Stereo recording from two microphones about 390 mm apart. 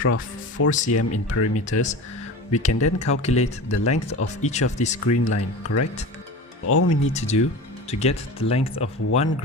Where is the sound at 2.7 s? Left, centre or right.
Left.